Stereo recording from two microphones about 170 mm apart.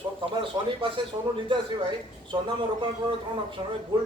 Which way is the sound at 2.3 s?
25° right (ahead or behind).